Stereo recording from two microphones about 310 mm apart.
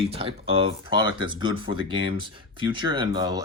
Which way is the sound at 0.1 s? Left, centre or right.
Centre.